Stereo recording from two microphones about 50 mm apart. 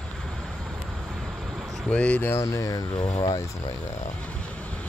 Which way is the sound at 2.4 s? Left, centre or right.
Left.